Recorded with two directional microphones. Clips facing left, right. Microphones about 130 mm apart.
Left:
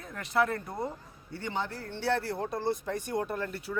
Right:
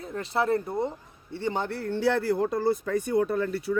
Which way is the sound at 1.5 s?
60° right (ahead or behind).